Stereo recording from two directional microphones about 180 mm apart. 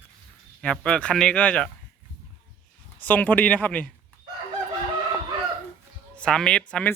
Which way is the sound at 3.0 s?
10° left (ahead or behind).